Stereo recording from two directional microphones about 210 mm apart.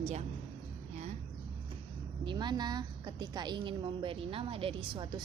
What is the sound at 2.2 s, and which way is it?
A woman's voice, 20° right (ahead or behind).